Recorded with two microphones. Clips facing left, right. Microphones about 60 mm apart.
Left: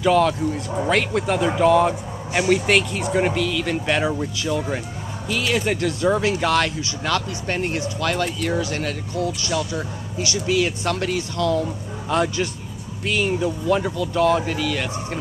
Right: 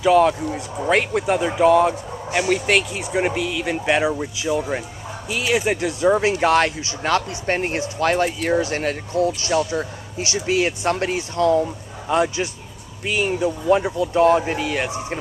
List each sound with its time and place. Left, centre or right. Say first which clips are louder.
0.0 s speech: right 2 dB; centre
11.6 s a man's voice: even; centre